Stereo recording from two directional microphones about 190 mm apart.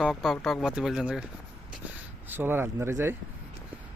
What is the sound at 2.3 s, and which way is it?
Speech, 10° right (ahead or behind).